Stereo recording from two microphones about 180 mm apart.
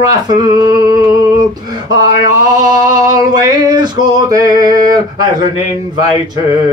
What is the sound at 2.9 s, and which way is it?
Male singing, 20° right (ahead or behind).